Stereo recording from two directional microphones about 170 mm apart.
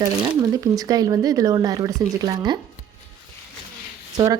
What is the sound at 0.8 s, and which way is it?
Speech, 20° right (ahead or behind).